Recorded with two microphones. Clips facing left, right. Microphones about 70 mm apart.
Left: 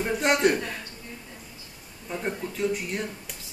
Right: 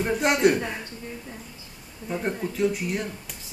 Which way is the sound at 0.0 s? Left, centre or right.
Centre.